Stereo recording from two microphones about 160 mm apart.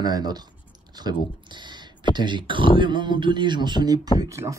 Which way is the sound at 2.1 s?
30° right (ahead or behind).